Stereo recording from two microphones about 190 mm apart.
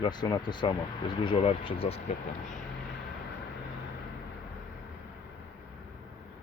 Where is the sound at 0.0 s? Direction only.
20° left (ahead or behind).